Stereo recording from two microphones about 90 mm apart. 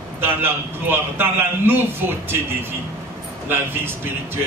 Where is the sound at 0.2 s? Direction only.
25° right (ahead or behind).